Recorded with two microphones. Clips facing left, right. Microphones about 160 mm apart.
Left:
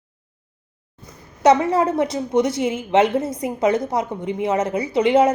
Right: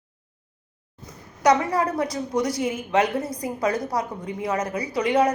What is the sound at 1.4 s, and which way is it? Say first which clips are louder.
A woman's voice: left 4 dB; 25° left (ahead or behind).